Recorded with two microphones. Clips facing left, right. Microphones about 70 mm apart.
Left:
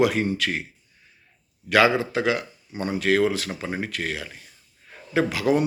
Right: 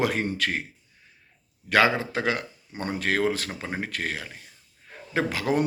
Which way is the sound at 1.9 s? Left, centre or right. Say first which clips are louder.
Left 3 dB; right.